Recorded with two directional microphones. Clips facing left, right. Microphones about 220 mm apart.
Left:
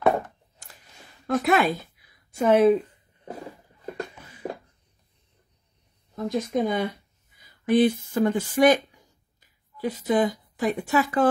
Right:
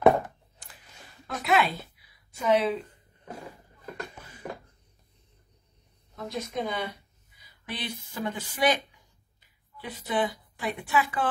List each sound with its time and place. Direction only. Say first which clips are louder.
1.2 s a woman's voice: left 5 dB; 45° left (ahead or behind)
6.1 s speech: left 8 dB; 50° left (ahead or behind)